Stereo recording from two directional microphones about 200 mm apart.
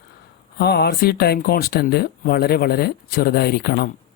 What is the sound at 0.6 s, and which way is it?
Speech, 55° left (ahead or behind).